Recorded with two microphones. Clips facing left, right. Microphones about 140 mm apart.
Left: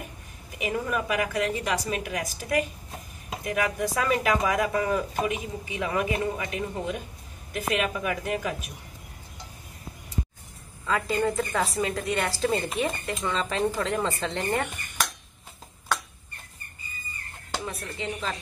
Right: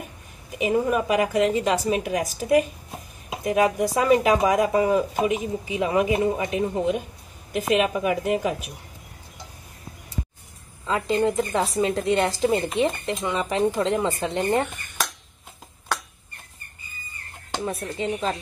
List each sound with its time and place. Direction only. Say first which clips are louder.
0.5 s speech: right 7 dB; 25° right (ahead or behind)
10.9 s speech: right 3 dB; 25° right (ahead or behind)
17.5 s a sound: right 5 dB; 25° right (ahead or behind)